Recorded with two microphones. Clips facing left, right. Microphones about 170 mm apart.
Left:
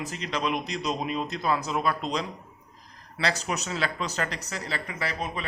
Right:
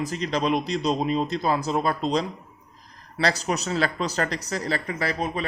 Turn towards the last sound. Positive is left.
turn(degrees=-35)  # may be behind; listen again after turning